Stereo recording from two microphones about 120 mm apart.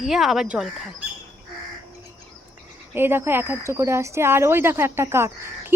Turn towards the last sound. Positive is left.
turn(degrees=-20)  # may be behind; listen again after turning